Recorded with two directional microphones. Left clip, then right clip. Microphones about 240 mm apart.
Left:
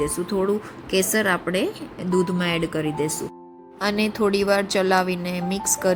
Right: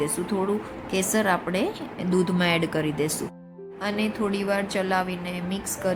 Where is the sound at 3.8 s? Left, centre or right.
Left.